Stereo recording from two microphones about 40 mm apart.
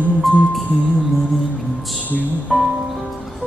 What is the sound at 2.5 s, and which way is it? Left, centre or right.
Music, centre.